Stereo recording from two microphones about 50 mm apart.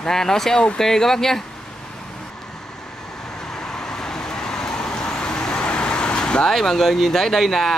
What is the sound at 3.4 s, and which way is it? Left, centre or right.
Vehicle, centre.